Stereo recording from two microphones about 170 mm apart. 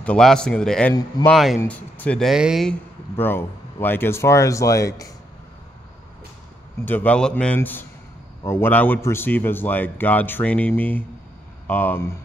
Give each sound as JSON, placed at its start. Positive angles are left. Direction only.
{"t": 0.0, "sound": "speech", "side_deg": 5}
{"t": 3.2, "sound": "a man's voice", "side_deg": 10}
{"t": 6.8, "sound": "a man's voice", "side_deg": 10}